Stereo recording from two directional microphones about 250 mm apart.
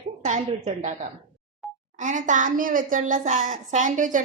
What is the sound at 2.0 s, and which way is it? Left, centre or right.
A woman's voice, right.